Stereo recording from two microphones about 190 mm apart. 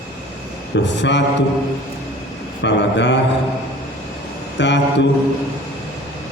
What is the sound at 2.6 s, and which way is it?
Speech, 70° left (ahead or behind).